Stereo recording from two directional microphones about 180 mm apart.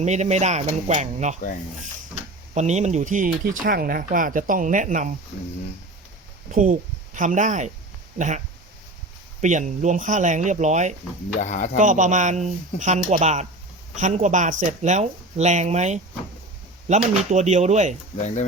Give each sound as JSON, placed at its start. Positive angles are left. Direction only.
{"t": 0.0, "sound": "speech", "side_deg": -40}
{"t": 2.6, "sound": "speech", "side_deg": -40}
{"t": 3.5, "sound": "speech", "side_deg": -55}
{"t": 6.5, "sound": "speech", "side_deg": -45}
{"t": 9.4, "sound": "speech", "side_deg": -45}
{"t": 11.3, "sound": "speech", "side_deg": 40}
{"t": 11.8, "sound": "speech", "side_deg": -45}
{"t": 18.2, "sound": "speech", "side_deg": 40}